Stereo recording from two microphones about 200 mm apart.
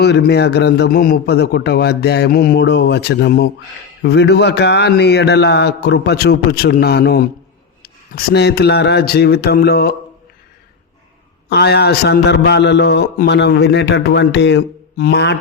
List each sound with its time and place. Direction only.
0.0 s a man's voice: 55° left (ahead or behind)
11.4 s a man's voice: 55° left (ahead or behind)